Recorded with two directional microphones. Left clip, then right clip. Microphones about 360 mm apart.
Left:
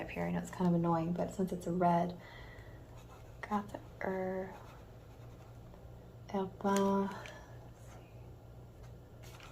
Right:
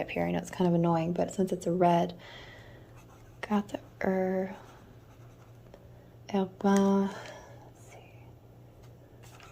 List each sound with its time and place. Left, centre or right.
0.0 s speech: centre
6.2 s speech: right